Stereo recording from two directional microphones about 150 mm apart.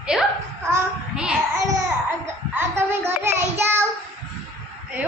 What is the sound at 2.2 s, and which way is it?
A child's voice, 15° right (ahead or behind).